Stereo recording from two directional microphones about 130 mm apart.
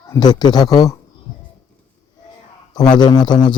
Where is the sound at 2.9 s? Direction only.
35° left (ahead or behind).